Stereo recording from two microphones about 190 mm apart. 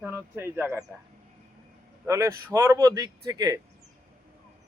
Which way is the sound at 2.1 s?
15° right (ahead or behind).